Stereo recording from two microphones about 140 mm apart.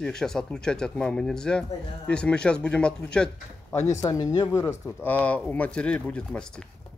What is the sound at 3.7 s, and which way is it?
Speech, 20° left (ahead or behind).